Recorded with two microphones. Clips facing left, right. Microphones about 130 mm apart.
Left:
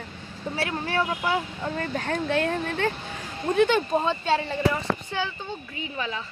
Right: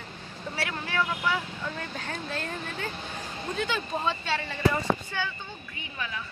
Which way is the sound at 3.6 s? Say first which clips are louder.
Left 11 dB; 60° left (ahead or behind).